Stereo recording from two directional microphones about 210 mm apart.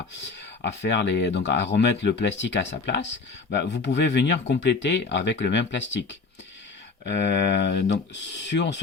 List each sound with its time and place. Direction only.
0.6 s speech: 55° left (ahead or behind)